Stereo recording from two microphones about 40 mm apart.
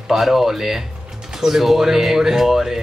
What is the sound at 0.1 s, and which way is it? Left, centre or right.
Speech, centre.